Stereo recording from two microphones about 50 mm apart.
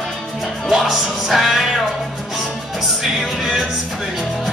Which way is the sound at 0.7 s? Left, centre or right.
Centre.